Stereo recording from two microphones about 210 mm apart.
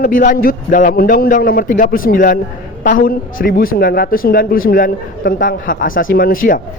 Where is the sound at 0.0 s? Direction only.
40° left (ahead or behind).